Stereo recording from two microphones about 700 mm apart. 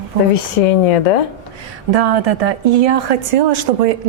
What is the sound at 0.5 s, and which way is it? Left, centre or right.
Speech, left.